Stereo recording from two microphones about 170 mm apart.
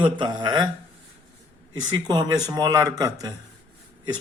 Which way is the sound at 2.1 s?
25° right (ahead or behind).